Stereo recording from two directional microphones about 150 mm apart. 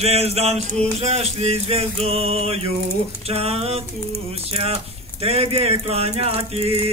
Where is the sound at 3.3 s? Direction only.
40° right (ahead or behind).